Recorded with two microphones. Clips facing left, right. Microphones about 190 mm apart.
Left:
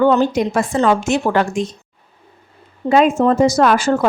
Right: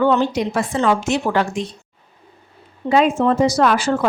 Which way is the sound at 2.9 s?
45° left (ahead or behind).